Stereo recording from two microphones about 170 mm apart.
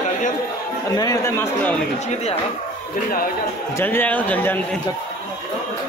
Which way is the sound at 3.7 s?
10° left (ahead or behind).